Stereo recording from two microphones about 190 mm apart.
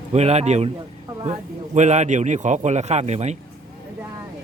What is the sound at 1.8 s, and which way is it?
A man's voice, 40° right (ahead or behind).